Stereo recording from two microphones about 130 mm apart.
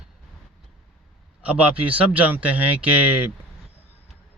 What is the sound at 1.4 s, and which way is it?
Speech, 10° right (ahead or behind).